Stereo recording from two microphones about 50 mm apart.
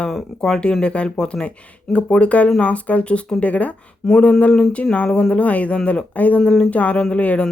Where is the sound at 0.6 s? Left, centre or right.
Left.